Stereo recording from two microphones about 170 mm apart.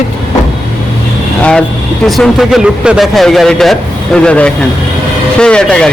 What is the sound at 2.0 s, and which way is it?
A man's voice, centre (ahead or behind).